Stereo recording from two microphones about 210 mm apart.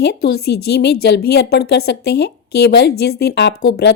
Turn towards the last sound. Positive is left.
turn(degrees=50)  # may be behind; listen again after turning